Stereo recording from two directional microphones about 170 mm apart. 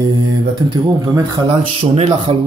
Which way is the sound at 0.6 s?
25° right (ahead or behind).